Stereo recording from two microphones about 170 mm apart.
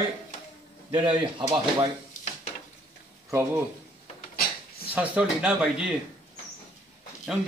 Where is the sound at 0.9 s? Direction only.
30° right (ahead or behind).